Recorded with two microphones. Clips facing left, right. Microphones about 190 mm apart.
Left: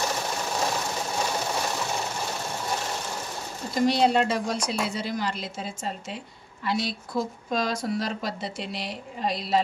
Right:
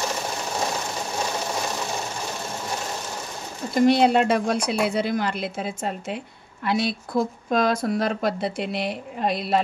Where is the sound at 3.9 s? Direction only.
60° right (ahead or behind).